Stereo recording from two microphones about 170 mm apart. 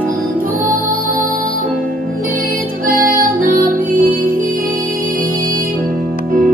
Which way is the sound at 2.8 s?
55° right (ahead or behind).